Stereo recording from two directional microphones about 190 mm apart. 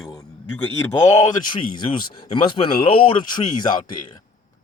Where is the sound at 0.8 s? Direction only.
20° left (ahead or behind).